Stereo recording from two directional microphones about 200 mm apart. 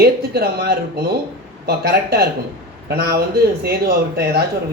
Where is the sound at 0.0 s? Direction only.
50° right (ahead or behind).